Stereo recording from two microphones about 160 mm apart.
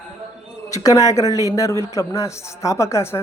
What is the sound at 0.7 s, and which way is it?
A man's voice, 20° left (ahead or behind).